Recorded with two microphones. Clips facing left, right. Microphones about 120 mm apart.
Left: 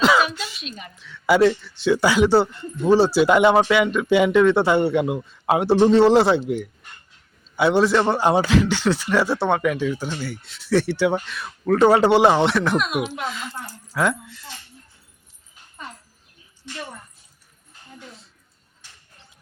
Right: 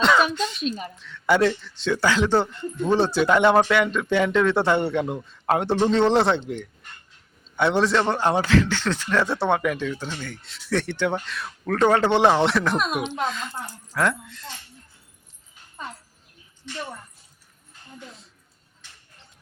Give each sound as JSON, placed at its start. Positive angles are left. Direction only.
{"t": 0.0, "sound": "a sound", "side_deg": 5}
{"t": 0.6, "sound": "speech", "side_deg": -35}
{"t": 0.9, "sound": "speech", "side_deg": 0}